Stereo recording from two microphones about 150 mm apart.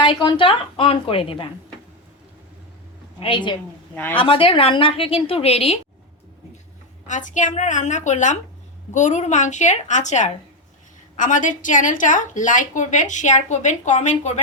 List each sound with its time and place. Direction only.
0.0 s a woman's voice: 35° left (ahead or behind)
3.2 s a woman's voice: 35° left (ahead or behind)
3.9 s speech: 10° left (ahead or behind)
4.2 s a woman's voice: 35° left (ahead or behind)
7.1 s a woman's voice: 55° left (ahead or behind)